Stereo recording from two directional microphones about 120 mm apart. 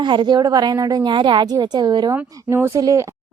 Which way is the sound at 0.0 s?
40° right (ahead or behind).